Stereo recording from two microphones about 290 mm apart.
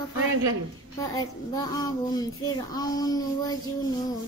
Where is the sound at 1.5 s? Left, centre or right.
Centre.